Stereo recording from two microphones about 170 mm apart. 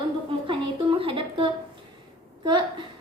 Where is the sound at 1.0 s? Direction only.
30° right (ahead or behind).